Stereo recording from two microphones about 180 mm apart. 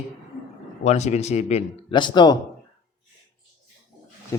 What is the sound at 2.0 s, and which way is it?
Speech, 25° left (ahead or behind).